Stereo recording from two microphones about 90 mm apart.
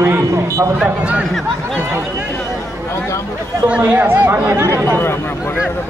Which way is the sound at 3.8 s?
20° right (ahead or behind).